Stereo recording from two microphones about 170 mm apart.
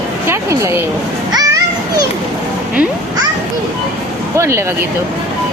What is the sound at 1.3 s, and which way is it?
Children playing, 20° right (ahead or behind).